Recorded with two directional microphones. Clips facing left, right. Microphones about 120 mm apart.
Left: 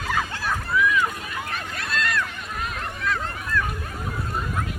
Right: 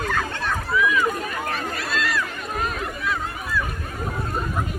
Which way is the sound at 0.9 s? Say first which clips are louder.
Right 2 dB; 45° right (ahead or behind).